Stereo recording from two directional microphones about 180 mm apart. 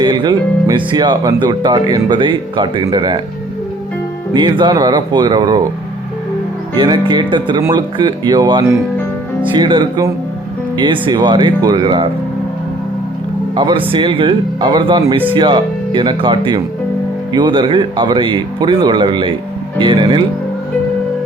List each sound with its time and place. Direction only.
0.0 s speech: 25° right (ahead or behind)
4.4 s speech: 25° right (ahead or behind)
6.7 s speech: 25° right (ahead or behind)
13.6 s speech: 25° right (ahead or behind)